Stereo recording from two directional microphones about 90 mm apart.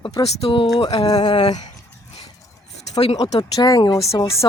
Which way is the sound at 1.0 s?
50° left (ahead or behind).